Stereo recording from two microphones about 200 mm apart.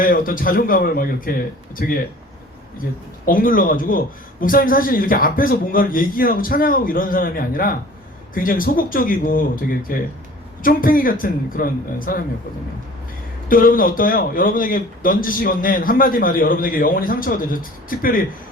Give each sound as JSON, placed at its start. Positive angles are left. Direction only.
{"t": 0.0, "sound": "a man's voice", "side_deg": 45}
{"t": 3.2, "sound": "a man's voice", "side_deg": 45}
{"t": 13.5, "sound": "a man's voice", "side_deg": 45}